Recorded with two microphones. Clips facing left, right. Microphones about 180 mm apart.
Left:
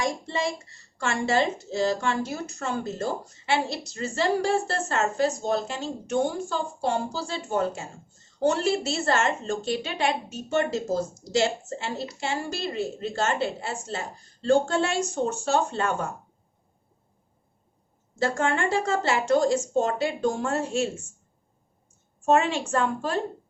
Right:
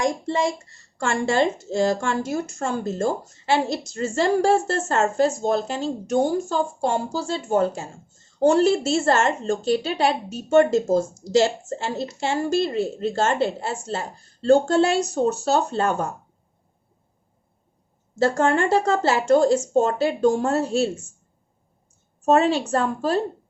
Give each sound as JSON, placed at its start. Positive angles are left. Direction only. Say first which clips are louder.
{"t": 0.9, "sound": "a woman's voice", "louder": "right 3 dB", "side_deg": -45}
{"t": 18.2, "sound": "a woman's voice", "louder": "right 6 dB", "side_deg": -40}
{"t": 22.3, "sound": "a woman's voice", "louder": "right 4 dB", "side_deg": -35}